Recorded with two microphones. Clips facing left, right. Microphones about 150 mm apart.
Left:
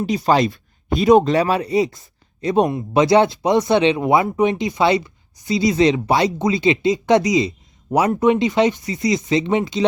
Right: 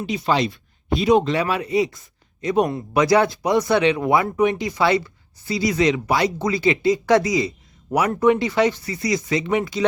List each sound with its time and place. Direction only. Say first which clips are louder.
0.0 s speech: left 4 dB; 40° left (ahead or behind); by 9.8 s 25° left (ahead or behind)